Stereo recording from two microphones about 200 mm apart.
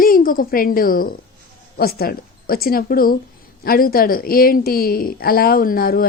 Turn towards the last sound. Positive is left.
turn(degrees=45)  # may be behind; listen again after turning